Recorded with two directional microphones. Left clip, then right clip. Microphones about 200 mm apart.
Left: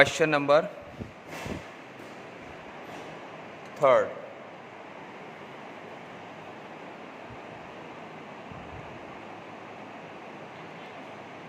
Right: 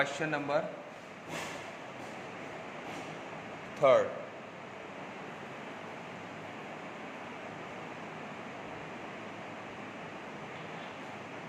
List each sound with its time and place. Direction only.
0.0 s a man's voice: 55° left (ahead or behind)
3.8 s speech: 15° left (ahead or behind)